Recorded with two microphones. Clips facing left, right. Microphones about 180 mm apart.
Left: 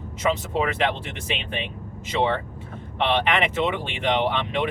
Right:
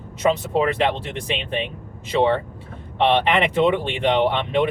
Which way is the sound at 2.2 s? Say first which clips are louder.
Right 5 dB; 35° right (ahead or behind).